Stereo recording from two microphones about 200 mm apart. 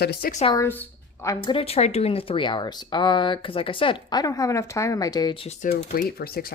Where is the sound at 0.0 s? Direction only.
55° left (ahead or behind).